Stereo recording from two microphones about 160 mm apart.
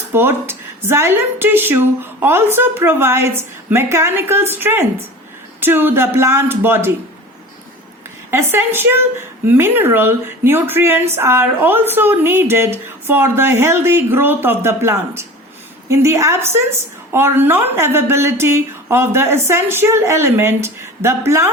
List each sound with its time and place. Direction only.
0.1 s speech: 15° right (ahead or behind)
8.3 s speech: 15° right (ahead or behind)